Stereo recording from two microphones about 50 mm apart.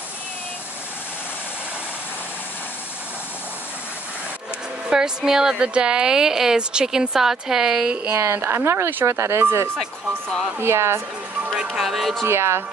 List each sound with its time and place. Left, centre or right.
4.8 s a woman's voice: centre
8.2 s speech: right
8.7 s speech: right
11.8 s speech: centre
12.3 s speech: right